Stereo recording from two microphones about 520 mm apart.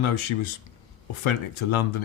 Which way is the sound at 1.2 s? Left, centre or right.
Left.